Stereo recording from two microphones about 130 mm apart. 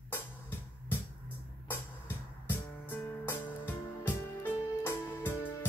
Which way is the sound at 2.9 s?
15° left (ahead or behind).